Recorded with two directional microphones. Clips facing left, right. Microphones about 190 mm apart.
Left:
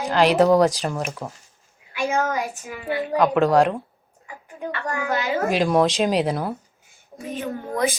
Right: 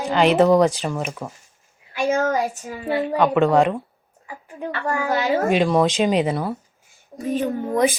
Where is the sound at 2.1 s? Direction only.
35° right (ahead or behind).